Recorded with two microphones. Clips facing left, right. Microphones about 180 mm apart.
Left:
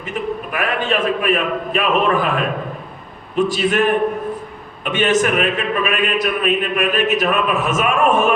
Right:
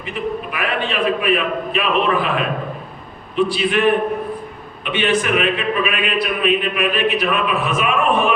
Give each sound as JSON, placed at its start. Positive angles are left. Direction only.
{"t": 0.1, "sound": "a man's voice", "side_deg": 45}
{"t": 3.3, "sound": "a man's voice", "side_deg": 45}
{"t": 4.9, "sound": "a man's voice", "side_deg": 45}